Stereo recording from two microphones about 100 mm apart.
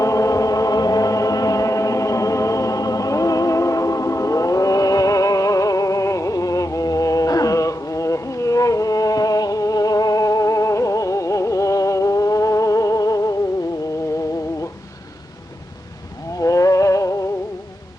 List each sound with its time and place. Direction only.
0.0 s chant: 35° left (ahead or behind)
16.4 s music: 35° left (ahead or behind)